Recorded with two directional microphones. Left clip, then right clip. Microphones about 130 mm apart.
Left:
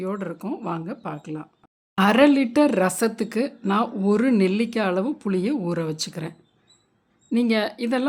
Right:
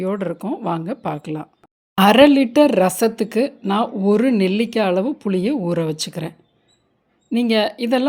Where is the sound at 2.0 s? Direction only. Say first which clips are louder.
Right 6 dB; 20° right (ahead or behind).